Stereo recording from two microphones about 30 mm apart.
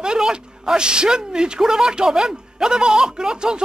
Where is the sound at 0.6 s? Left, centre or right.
Right.